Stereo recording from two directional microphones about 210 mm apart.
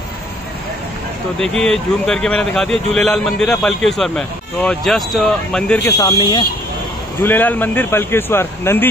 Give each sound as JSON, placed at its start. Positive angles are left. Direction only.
{"t": 1.4, "sound": "speech", "side_deg": 5}
{"t": 5.9, "sound": "speech", "side_deg": 20}
{"t": 7.2, "sound": "speech", "side_deg": 10}